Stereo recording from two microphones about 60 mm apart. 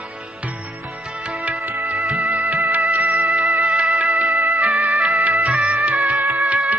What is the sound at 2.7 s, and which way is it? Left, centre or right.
Music, right.